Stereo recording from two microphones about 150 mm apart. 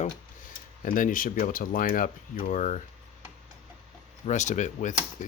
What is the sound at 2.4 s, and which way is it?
Speech, 50° left (ahead or behind).